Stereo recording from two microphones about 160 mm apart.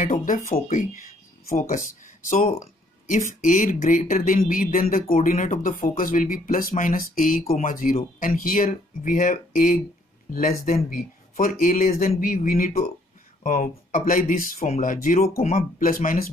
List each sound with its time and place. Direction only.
0.0 s speech: 60° left (ahead or behind)
1.5 s speech: 55° left (ahead or behind)
3.1 s speech: 55° left (ahead or behind)